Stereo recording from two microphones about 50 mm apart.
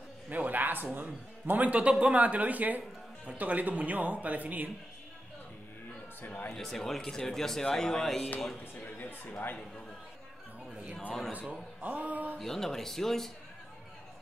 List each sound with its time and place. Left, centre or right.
0.3 s a sound: right
0.9 s speech: right
6.2 s speech: left
6.5 s speech: centre
8.8 s speech: left
11.8 s speech: right
12.4 s speech: centre